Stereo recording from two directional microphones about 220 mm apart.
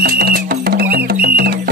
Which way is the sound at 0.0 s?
45° right (ahead or behind).